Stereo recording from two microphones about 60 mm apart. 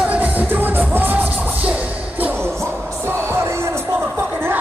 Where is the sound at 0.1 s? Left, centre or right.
Right.